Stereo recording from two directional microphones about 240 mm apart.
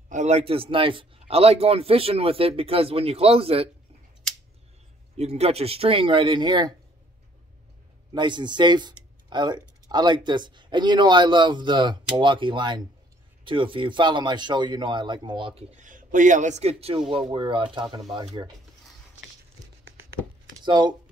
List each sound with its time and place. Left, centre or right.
0.1 s speech: right
5.1 s speech: right
8.1 s speech: centre
20.6 s speech: centre